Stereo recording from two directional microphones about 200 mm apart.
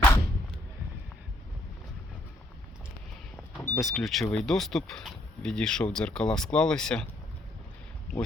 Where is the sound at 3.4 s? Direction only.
10° left (ahead or behind).